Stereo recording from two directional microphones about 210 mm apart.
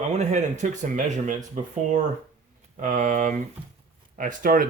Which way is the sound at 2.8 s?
40° right (ahead or behind).